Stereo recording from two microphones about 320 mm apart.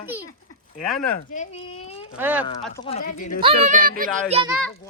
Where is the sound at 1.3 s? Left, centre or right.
Left.